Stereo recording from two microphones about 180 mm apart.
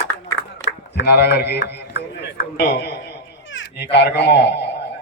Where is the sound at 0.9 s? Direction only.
65° left (ahead or behind).